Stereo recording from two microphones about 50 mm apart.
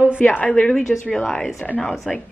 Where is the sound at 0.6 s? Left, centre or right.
Centre.